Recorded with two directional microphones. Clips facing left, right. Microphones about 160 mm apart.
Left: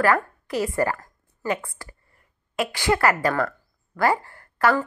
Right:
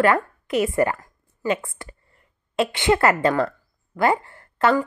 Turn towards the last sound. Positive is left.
turn(degrees=-20)  # may be behind; listen again after turning